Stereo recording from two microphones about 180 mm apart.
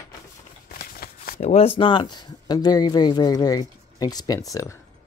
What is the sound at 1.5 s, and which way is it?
Speech, 30° left (ahead or behind).